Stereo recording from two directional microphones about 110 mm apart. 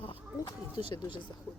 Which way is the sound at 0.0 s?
50° left (ahead or behind).